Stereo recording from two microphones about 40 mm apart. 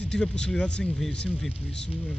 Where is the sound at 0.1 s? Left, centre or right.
Centre.